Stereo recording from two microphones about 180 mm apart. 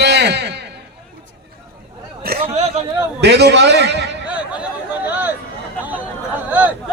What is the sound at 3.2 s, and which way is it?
Speech, 70° right (ahead or behind).